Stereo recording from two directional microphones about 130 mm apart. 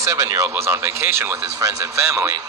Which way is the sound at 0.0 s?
25° right (ahead or behind).